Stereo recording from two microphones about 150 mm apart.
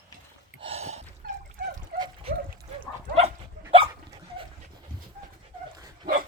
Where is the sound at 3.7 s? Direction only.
40° right (ahead or behind).